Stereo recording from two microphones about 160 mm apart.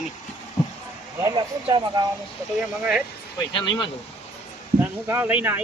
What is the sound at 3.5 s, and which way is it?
Speech, 30° left (ahead or behind).